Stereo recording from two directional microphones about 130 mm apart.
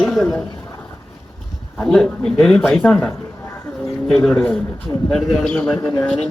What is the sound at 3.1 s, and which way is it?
Bird, 20° left (ahead or behind).